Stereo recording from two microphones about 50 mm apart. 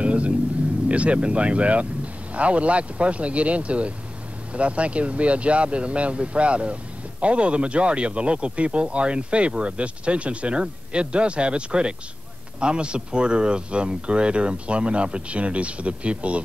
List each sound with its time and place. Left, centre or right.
0.0 s vehicle: right
0.8 s speech: right